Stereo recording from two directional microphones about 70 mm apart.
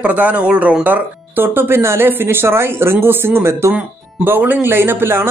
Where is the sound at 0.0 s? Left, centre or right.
Right.